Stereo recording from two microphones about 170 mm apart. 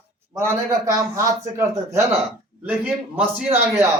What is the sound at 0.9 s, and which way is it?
Speech, 15° right (ahead or behind).